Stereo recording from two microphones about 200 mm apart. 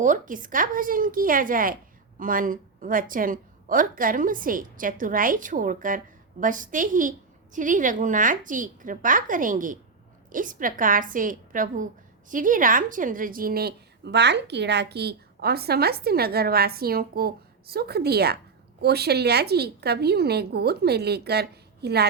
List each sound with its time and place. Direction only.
0.0 s a woman's voice: 40° right (ahead or behind)